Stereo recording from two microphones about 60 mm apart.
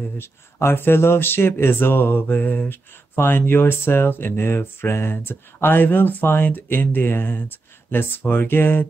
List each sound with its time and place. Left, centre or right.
0.2 s speech: left